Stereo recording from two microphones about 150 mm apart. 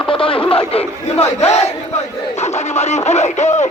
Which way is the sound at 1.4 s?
45° left (ahead or behind).